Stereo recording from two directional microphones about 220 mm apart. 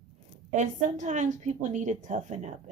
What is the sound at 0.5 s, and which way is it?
A woman's voice, 30° right (ahead or behind).